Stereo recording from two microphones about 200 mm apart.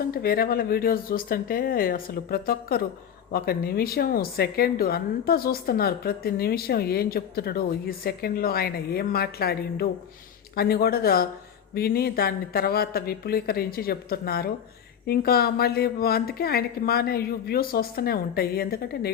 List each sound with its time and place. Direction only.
0.0 s a woman's voice: 50° left (ahead or behind)